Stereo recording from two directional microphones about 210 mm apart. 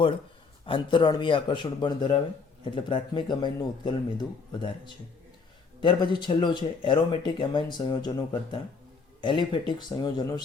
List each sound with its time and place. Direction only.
0.6 s speech: 25° left (ahead or behind)
5.8 s speech: 20° left (ahead or behind)